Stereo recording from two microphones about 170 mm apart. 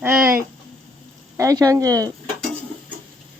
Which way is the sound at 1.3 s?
20° right (ahead or behind).